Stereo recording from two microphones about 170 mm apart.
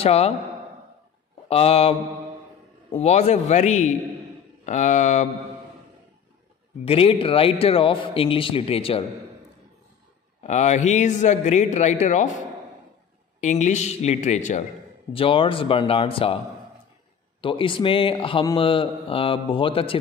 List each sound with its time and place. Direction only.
0.0 s speech: 35° left (ahead or behind)
1.5 s speech: 35° left (ahead or behind)
3.0 s a man's voice: 40° left (ahead or behind)
6.8 s speech: 35° left (ahead or behind)
10.4 s a man's voice: 45° left (ahead or behind)
13.4 s a man's voice: 45° left (ahead or behind)
15.1 s speech: 30° left (ahead or behind)
17.4 s speech: 30° left (ahead or behind)